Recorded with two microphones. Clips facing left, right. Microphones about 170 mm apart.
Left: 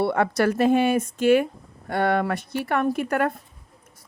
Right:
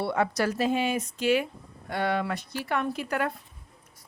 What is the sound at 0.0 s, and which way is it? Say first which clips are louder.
Speech: left 5 dB; 55° left (ahead or behind).